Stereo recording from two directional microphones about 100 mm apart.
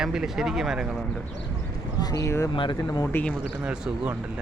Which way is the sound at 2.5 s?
55° left (ahead or behind).